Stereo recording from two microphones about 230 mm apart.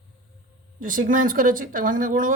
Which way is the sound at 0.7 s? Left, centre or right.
Right.